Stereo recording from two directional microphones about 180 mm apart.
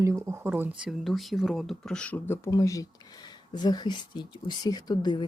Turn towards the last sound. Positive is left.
turn(degrees=25)  # may be behind; listen again after turning